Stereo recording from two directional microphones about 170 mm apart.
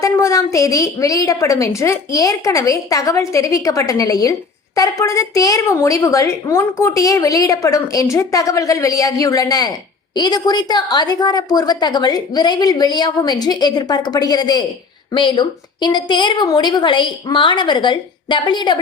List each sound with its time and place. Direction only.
0.0 s a woman's voice: 20° left (ahead or behind)